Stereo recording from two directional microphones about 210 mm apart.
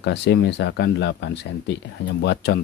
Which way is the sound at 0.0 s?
55° left (ahead or behind).